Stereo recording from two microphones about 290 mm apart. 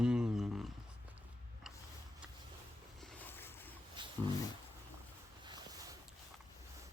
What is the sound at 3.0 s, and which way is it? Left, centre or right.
Boat, centre.